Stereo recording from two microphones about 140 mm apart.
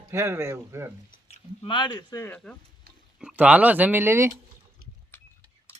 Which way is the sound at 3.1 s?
10° right (ahead or behind).